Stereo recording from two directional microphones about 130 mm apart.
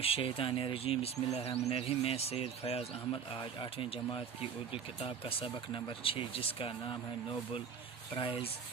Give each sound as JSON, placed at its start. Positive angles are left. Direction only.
{"t": 0.0, "sound": "speech", "side_deg": 45}